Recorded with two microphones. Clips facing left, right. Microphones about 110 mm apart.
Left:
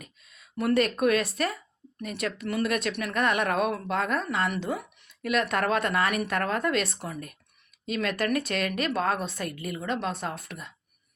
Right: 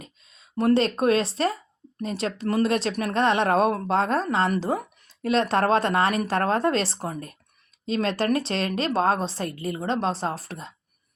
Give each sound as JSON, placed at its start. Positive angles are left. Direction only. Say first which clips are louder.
{"t": 0.0, "sound": "a woman's voice", "louder": "right 3 dB", "side_deg": -25}